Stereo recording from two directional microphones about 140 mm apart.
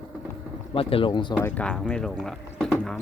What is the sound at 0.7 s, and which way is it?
Speech, 40° left (ahead or behind).